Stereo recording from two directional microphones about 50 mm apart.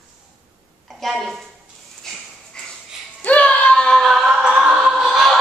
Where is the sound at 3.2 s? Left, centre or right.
Left.